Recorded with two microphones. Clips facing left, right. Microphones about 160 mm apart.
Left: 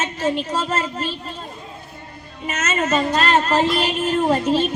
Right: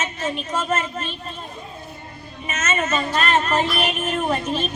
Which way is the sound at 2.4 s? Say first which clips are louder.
Left 2 dB; 35° left (ahead or behind).